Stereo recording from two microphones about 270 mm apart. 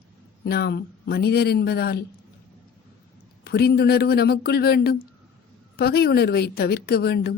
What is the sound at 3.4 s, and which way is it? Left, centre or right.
A woman's voice, left.